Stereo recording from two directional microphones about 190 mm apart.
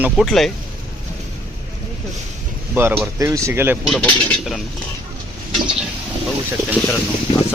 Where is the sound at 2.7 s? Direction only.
10° right (ahead or behind).